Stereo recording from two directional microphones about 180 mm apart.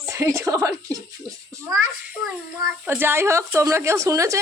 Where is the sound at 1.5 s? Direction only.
15° right (ahead or behind).